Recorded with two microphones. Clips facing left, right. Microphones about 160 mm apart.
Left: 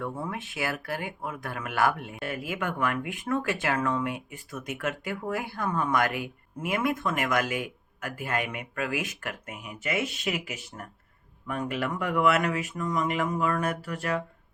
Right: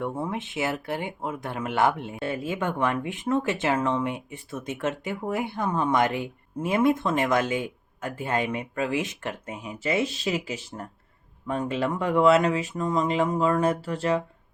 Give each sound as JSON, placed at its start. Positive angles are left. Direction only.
{"t": 0.0, "sound": "speech", "side_deg": -20}